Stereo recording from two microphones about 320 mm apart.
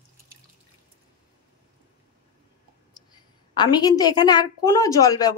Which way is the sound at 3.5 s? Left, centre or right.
Centre.